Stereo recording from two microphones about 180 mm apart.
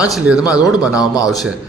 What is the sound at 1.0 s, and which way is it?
Speech, 20° left (ahead or behind).